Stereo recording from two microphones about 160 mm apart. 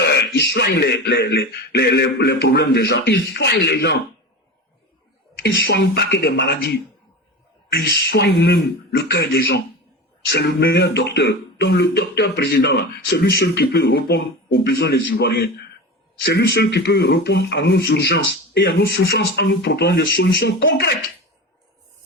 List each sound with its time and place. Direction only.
0.0 s speech: 90° left
5.4 s speech: 75° left (ahead or behind)